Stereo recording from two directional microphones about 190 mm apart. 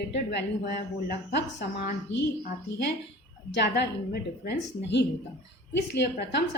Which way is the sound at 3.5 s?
60° left (ahead or behind).